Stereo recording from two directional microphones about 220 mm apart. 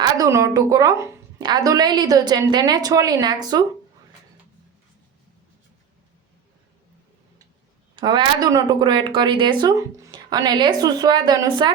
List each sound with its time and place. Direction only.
0.0 s speech: 15° right (ahead or behind)
7.9 s speech: 20° right (ahead or behind)